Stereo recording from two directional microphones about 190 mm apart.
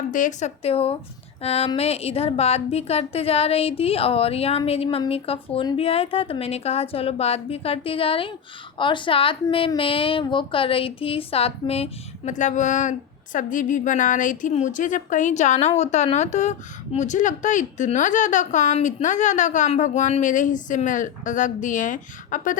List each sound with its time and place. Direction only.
0.1 s a woman's voice: 40° left (ahead or behind)